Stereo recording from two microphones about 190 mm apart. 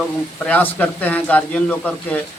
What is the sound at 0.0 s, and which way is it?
Speech, 5° left (ahead or behind).